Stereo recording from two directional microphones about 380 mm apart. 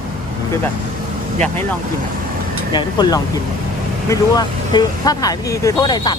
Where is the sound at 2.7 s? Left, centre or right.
Centre.